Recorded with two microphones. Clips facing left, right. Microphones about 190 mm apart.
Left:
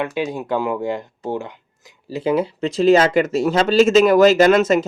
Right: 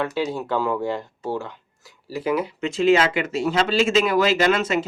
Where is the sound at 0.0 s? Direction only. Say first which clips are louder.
Left 1 dB; 15° left (ahead or behind).